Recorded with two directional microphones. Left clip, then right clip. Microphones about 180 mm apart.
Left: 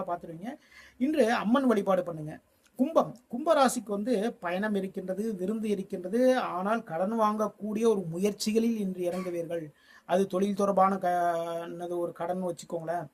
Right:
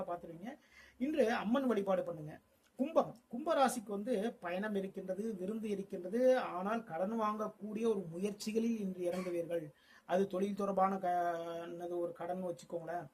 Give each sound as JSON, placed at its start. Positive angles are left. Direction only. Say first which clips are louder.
{"t": 0.0, "sound": "speech", "louder": "left 8 dB", "side_deg": 25}
{"t": 10.1, "sound": "speech", "louder": "left 7 dB", "side_deg": 30}